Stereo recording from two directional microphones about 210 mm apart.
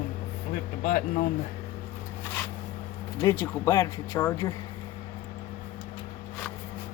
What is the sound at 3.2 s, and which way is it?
Speech, 15° left (ahead or behind).